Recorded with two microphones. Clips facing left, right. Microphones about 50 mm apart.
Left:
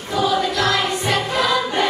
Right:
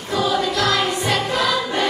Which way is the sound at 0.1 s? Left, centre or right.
Left.